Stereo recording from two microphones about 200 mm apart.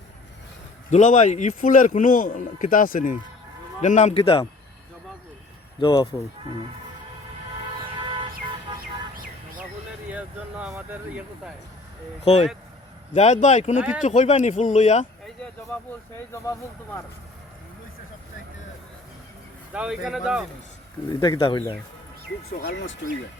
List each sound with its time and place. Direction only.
0.9 s speech: 35° left (ahead or behind)
5.8 s speech: 25° left (ahead or behind)
7.9 s vehicle: 25° right (ahead or behind)
10.1 s speech: 5° right (ahead or behind)
12.2 s speech: 30° left (ahead or behind)
13.7 s speech: 5° right (ahead or behind)
14.0 s speech: 35° left (ahead or behind)
15.2 s speech: 5° left (ahead or behind)
19.7 s speech: 5° right (ahead or behind)
21.1 s speech: 20° left (ahead or behind)
22.5 s speech: 55° left (ahead or behind)